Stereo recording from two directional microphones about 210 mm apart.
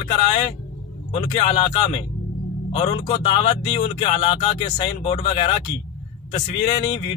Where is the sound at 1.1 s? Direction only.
30° left (ahead or behind).